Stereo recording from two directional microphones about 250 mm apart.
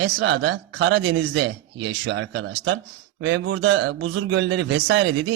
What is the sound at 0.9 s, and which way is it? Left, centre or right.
Speech, right.